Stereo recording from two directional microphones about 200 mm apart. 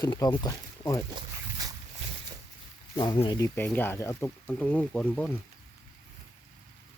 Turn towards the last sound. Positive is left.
turn(degrees=10)  # may be behind; listen again after turning